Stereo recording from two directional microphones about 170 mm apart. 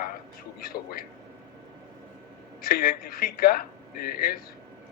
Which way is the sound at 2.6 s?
60° left (ahead or behind).